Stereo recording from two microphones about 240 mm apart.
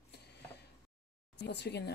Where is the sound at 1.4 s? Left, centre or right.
Left.